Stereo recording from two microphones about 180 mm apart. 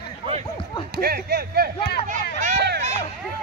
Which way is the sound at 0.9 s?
60° right (ahead or behind).